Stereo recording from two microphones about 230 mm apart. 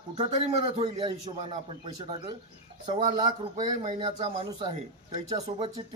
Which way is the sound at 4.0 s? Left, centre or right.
Right.